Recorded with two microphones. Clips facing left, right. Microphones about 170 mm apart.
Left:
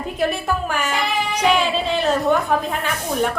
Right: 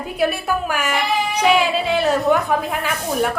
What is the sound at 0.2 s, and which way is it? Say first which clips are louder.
A woman's voice: right 2 dB; 5° right (ahead or behind).